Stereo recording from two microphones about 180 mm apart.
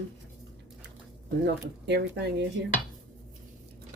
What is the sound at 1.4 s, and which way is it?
A woman's voice, 65° right (ahead or behind).